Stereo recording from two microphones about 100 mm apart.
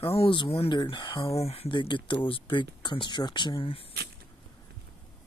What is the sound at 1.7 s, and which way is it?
Speech, 55° left (ahead or behind).